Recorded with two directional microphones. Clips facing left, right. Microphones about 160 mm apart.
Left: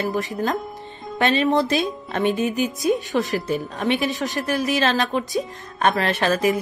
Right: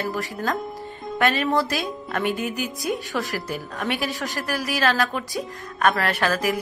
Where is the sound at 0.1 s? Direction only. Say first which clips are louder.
Left 3 dB; 20° left (ahead or behind).